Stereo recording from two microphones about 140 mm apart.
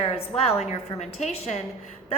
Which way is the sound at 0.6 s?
50° left (ahead or behind).